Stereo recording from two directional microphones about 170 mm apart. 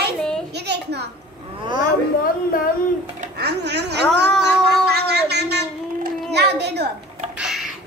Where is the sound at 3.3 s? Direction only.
75° right (ahead or behind).